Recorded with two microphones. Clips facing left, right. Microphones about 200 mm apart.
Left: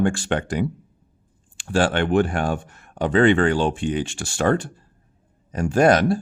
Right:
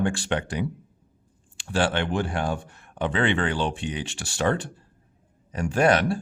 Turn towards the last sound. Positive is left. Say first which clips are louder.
# left 4 dB
turn(degrees=40)  # may be behind; listen again after turning